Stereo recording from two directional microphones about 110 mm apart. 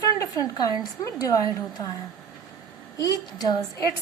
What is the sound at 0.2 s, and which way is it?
Speech, 35° left (ahead or behind).